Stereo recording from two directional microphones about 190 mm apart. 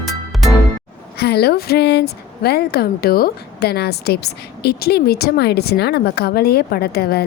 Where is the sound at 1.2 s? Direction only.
55° left (ahead or behind).